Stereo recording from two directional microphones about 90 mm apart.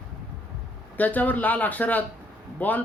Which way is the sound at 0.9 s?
20° left (ahead or behind).